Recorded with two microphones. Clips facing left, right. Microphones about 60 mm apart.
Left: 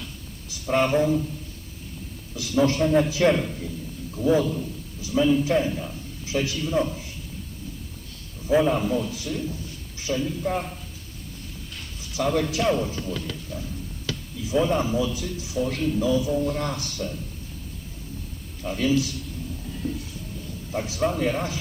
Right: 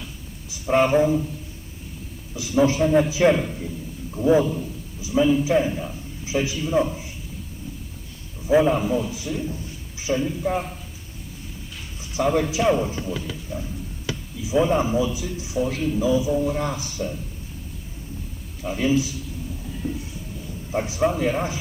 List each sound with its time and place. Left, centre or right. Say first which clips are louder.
0.5 s a man's voice: right 3 dB; centre
2.3 s a man's voice: right 2 dB; centre
4.1 s a man's voice: right 3 dB; right
8.4 s a man's voice: right 2 dB; centre
10.4 s a man's voice: right 2 dB; centre
12.1 s a man's voice: right 3 dB; centre
15.6 s a man's voice: right 1 dB; centre
18.6 s a man's voice: right 1 dB; centre
19.7 s train: right 1 dB; centre
20.7 s a man's voice: right 3 dB; right